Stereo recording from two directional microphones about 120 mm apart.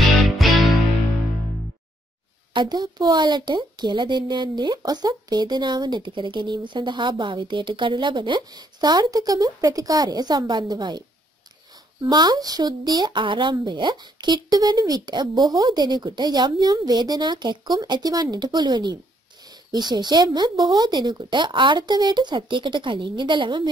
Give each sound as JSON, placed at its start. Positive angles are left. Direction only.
{"t": 0.4, "sound": "music", "side_deg": 0}
{"t": 2.5, "sound": "a woman's voice", "side_deg": -40}
{"t": 12.1, "sound": "a woman's voice", "side_deg": -35}